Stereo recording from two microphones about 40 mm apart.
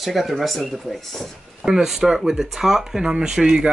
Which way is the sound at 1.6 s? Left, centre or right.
Centre.